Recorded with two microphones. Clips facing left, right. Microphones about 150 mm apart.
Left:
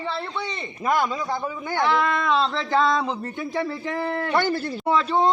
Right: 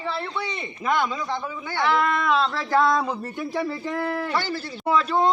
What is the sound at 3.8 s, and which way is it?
Speech, 20° left (ahead or behind).